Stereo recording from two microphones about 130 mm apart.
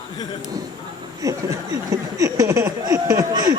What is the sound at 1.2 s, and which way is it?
Speech, 25° right (ahead or behind).